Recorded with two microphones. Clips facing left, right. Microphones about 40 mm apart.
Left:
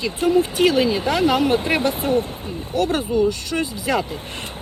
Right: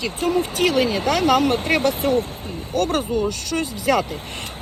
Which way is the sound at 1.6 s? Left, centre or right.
Left.